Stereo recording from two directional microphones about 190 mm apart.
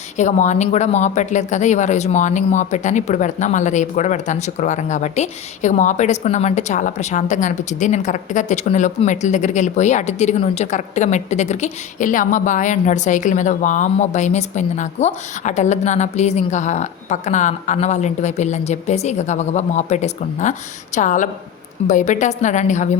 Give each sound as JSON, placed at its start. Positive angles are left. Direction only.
{"t": 0.2, "sound": "speech", "side_deg": 40}